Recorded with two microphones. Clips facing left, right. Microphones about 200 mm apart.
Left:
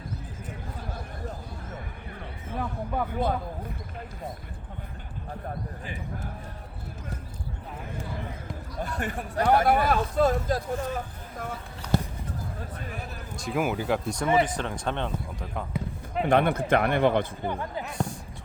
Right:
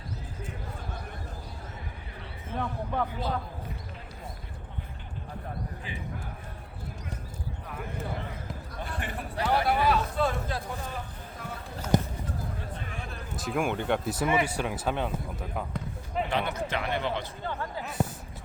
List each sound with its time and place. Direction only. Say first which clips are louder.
2.6 s speech: left 1 dB; 10° left (ahead or behind)
3.1 s speech: left 6 dB; 50° left (ahead or behind)
8.8 s speech: left 5 dB; 45° left (ahead or behind)
11.9 s basketball bounce: right 1 dB; 15° right (ahead or behind)
13.0 s speech: even; centre (ahead or behind)
16.3 s speech: left 12 dB; 55° left (ahead or behind)
17.4 s speech: left 3 dB; 15° left (ahead or behind)